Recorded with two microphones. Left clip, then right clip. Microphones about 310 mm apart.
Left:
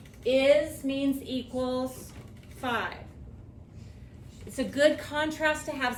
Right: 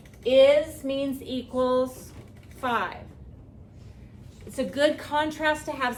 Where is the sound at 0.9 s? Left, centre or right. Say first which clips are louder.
Right 1 dB; centre.